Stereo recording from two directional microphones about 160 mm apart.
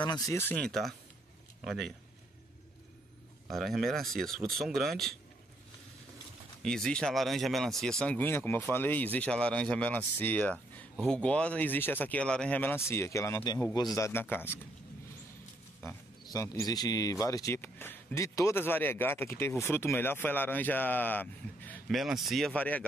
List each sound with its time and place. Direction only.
0.0 s speech: 25° left (ahead or behind)
0.4 s speech: 10° left (ahead or behind)
3.4 s speech: centre (ahead or behind)
6.6 s speech: 5° left (ahead or behind)
15.8 s speech: 20° left (ahead or behind)
21.8 s speech: centre (ahead or behind)